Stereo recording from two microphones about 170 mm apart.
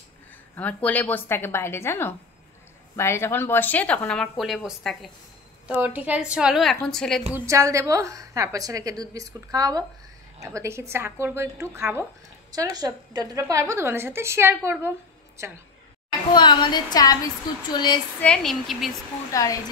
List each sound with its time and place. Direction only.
0.6 s a woman's voice: 10° left (ahead or behind)
7.3 s a woman's voice: 20° right (ahead or behind)
16.3 s a woman's voice: 25° left (ahead or behind)
18.2 s a woman's voice: 5° left (ahead or behind)
19.3 s a woman's voice: 20° left (ahead or behind)